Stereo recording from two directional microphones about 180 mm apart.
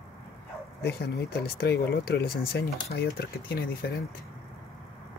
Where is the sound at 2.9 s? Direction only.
55° left (ahead or behind).